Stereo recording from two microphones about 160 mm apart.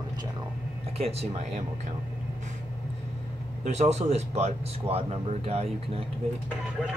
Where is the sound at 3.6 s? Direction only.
45° right (ahead or behind).